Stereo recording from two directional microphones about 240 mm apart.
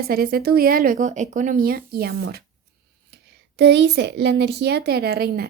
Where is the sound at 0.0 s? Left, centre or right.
Right.